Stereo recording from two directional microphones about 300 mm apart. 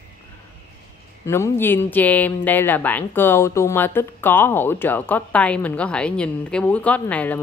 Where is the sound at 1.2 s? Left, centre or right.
Centre.